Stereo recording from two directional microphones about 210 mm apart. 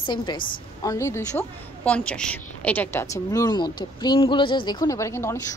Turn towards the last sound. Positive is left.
turn(degrees=10)  # may be behind; listen again after turning